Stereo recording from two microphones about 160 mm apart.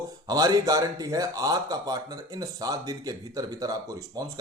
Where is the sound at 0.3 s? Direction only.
25° right (ahead or behind).